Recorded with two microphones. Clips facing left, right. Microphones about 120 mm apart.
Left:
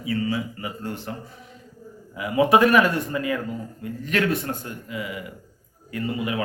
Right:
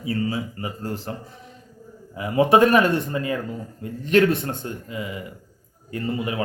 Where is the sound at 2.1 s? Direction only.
35° right (ahead or behind).